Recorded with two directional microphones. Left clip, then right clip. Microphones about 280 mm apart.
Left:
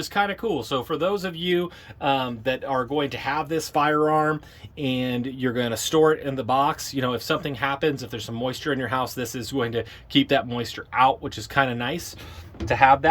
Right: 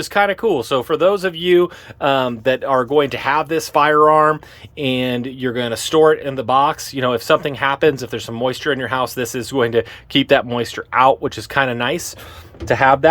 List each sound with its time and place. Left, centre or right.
0.0 s speech: centre